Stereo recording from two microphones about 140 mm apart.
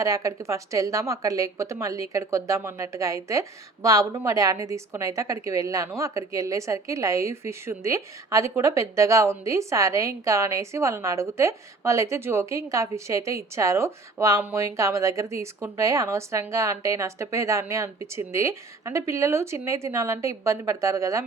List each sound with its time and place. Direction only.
0.0 s a woman's voice: 25° right (ahead or behind)